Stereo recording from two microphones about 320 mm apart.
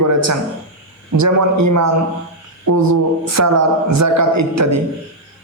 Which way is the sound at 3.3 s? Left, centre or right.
Right.